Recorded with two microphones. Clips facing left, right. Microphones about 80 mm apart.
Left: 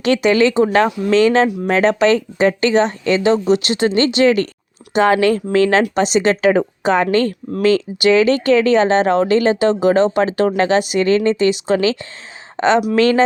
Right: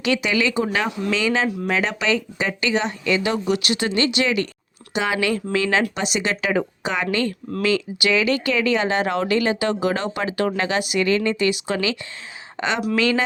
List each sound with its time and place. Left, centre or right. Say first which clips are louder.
0.0 s speech: left 7 dB; left
3.2 s a woman's voice: left 7 dB; left